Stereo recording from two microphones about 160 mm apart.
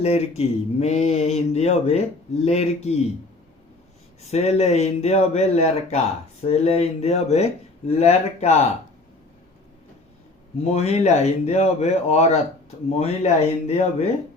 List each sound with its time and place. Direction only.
0.0 s speech: 40° left (ahead or behind)
4.2 s speech: 40° left (ahead or behind)
10.6 s speech: 40° left (ahead or behind)